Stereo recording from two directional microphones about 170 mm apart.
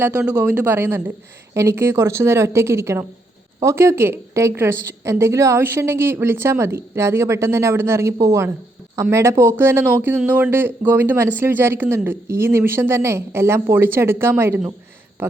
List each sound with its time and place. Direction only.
0.0 s speech: 10° right (ahead or behind)